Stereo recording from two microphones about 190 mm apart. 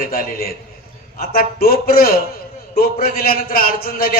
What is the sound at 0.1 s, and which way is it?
A man's voice, 50° left (ahead or behind).